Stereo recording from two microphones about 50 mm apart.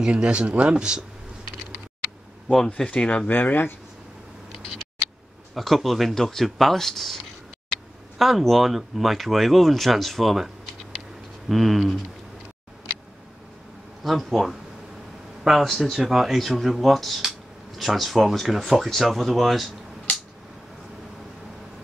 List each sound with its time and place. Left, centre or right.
0.0 s speech: right
2.4 s speech: centre
2.9 s speech: left
3.3 s speech: left
5.5 s speech: centre
8.2 s speech: centre
14.0 s speech: centre